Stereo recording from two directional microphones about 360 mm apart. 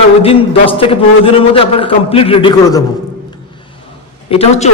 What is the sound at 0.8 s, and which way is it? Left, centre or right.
A man's voice, centre.